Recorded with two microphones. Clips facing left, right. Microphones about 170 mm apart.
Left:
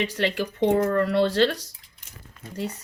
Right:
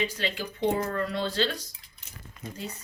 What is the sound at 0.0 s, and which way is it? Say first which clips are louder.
Speech: left 5 dB; 75° left (ahead or behind).